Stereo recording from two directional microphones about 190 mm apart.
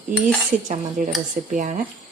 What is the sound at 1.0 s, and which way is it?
Speech, 45° right (ahead or behind).